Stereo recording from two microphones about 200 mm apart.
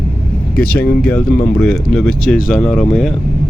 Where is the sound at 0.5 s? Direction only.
50° left (ahead or behind).